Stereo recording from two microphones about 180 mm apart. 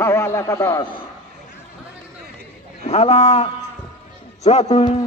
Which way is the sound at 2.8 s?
35° left (ahead or behind).